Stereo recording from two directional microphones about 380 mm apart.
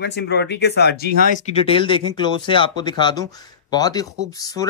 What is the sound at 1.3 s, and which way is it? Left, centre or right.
Speech, centre.